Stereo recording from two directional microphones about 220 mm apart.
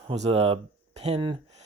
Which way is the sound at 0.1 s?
25° right (ahead or behind).